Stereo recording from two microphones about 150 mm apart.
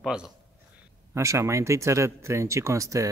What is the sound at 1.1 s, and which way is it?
Speech, 20° right (ahead or behind).